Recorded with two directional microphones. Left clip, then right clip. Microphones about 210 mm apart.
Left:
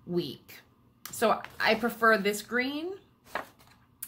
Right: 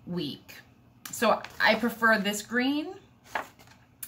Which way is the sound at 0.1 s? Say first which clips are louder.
Left 2 dB; 30° left (ahead or behind).